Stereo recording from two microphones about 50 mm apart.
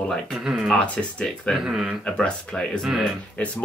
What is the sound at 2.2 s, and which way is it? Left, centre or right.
Speech, centre.